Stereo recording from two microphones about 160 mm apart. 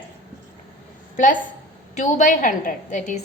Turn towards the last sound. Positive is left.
turn(degrees=55)  # may be behind; listen again after turning